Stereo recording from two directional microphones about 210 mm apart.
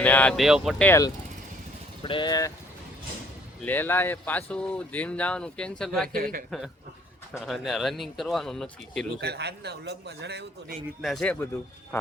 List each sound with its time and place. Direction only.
0.0 s speech: 5° left (ahead or behind)
0.9 s speech: 15° left (ahead or behind)
3.6 s speech: 10° left (ahead or behind)
6.1 s a man's voice: 40° right (ahead or behind)
7.4 s speech: centre (ahead or behind)
9.2 s a man's voice: 50° right (ahead or behind)
11.0 s speech: 5° left (ahead or behind)